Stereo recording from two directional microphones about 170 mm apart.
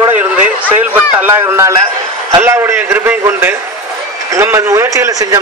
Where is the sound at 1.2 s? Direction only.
15° right (ahead or behind).